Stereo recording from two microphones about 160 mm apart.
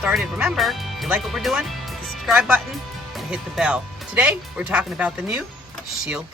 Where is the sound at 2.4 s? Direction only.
15° right (ahead or behind).